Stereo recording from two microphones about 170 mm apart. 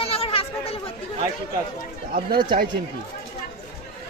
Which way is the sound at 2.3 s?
25° right (ahead or behind).